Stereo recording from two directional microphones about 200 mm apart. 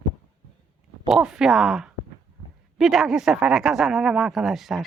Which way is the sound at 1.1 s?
5° right (ahead or behind).